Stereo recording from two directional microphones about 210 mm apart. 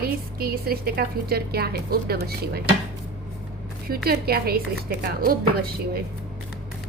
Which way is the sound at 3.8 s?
45° right (ahead or behind).